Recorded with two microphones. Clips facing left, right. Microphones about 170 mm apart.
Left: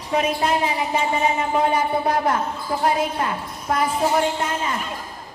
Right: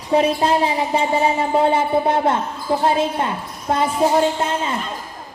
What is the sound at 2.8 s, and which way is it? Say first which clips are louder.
A woman's voice: right 1 dB; 25° right (ahead or behind).